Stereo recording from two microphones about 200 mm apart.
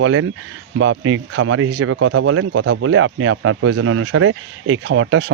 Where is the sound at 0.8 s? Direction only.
70° right (ahead or behind).